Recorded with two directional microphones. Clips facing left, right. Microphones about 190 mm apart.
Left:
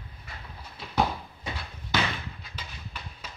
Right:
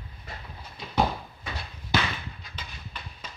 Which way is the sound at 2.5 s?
10° left (ahead or behind).